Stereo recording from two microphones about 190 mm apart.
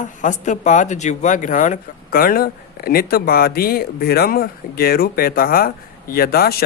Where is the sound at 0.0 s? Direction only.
40° left (ahead or behind).